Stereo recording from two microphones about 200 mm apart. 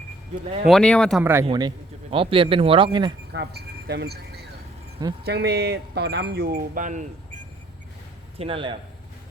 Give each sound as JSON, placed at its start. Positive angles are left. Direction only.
{"t": 0.7, "sound": "speech", "side_deg": 5}
{"t": 1.2, "sound": "speech", "side_deg": -10}
{"t": 1.5, "sound": "a man's voice", "side_deg": -25}
{"t": 3.3, "sound": "speech", "side_deg": -55}
{"t": 8.4, "sound": "a man's voice", "side_deg": -25}